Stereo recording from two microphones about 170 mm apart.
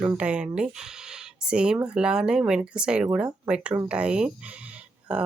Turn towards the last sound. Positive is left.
turn(degrees=-5)  # may be behind; listen again after turning